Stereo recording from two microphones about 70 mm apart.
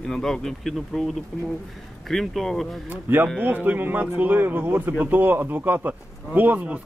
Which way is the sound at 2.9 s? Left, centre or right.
Right.